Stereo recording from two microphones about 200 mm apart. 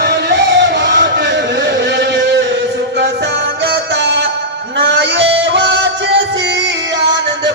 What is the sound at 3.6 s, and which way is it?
Music, 55° right (ahead or behind).